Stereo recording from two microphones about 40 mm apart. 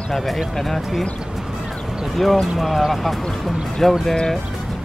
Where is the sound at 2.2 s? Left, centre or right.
Centre.